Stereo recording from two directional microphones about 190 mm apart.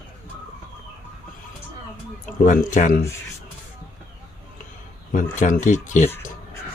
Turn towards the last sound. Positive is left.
turn(degrees=40)  # may be behind; listen again after turning